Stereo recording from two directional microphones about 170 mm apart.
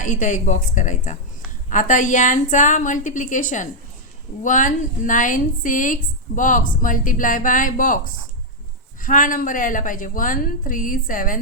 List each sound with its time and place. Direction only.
0.0 s a woman's voice: 45° left (ahead or behind)